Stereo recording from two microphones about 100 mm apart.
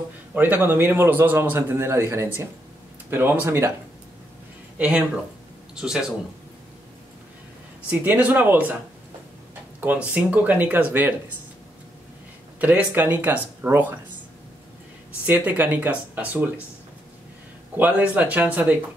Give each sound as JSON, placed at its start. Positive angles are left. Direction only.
{"t": 0.3, "sound": "a man's voice", "side_deg": -15}
{"t": 4.7, "sound": "speech", "side_deg": -10}
{"t": 7.9, "sound": "speech", "side_deg": -15}
{"t": 9.8, "sound": "speech", "side_deg": -15}
{"t": 12.5, "sound": "a man's voice", "side_deg": -15}
{"t": 15.2, "sound": "speech", "side_deg": -20}
{"t": 17.7, "sound": "speech", "side_deg": -15}